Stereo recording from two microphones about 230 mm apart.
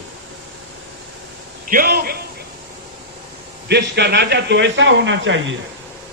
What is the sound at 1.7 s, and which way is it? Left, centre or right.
Speech, right.